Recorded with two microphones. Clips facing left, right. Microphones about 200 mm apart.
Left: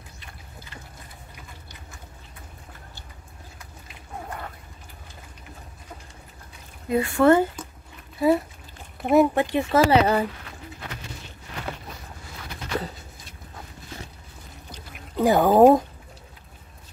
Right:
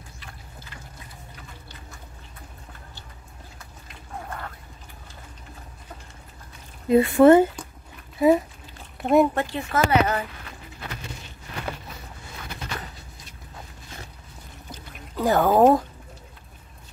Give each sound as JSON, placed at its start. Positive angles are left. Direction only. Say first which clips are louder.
{"t": 6.9, "sound": "speech", "louder": "right 4 dB", "side_deg": -20}
{"t": 9.0, "sound": "speech", "louder": "even", "side_deg": 0}
{"t": 9.3, "sound": "speech", "louder": "left 4 dB", "side_deg": 15}
{"t": 9.7, "sound": "speech", "louder": "left 3 dB", "side_deg": 30}
{"t": 15.1, "sound": "speech", "louder": "left 2 dB", "side_deg": 15}